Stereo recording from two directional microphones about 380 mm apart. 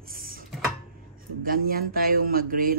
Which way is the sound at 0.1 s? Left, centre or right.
Right.